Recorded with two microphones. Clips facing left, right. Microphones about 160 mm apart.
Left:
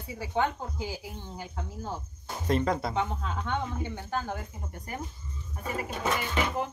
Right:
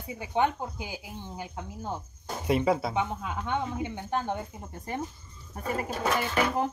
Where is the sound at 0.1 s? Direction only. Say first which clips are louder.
Right 2 dB; 20° right (ahead or behind).